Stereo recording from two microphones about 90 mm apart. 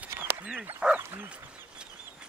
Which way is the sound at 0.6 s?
15° right (ahead or behind).